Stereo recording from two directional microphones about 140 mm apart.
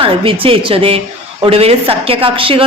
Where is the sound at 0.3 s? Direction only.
40° right (ahead or behind).